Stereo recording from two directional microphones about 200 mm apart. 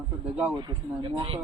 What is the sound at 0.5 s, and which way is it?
Speech, 20° right (ahead or behind).